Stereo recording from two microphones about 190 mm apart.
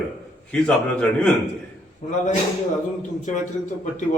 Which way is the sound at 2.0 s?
40° left (ahead or behind).